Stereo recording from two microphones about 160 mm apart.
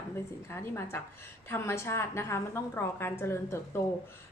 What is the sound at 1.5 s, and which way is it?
A woman's voice, 15° left (ahead or behind).